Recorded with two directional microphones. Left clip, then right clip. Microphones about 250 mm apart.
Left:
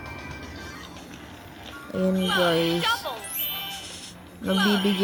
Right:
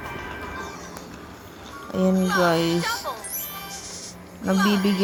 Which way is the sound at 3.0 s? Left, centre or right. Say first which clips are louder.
Even; left.